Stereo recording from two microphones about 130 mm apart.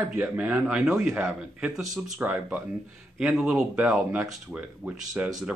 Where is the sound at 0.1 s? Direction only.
15° right (ahead or behind).